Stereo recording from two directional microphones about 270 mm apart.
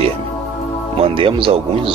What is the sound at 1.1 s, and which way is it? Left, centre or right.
Speech, centre.